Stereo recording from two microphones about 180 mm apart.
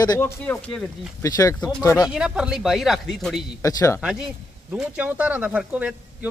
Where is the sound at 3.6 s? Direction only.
15° left (ahead or behind).